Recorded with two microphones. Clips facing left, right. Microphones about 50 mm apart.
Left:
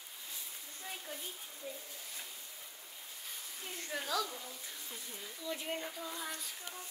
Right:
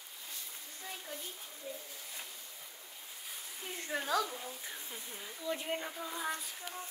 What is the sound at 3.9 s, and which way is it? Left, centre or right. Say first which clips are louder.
Speech: right 4 dB; right.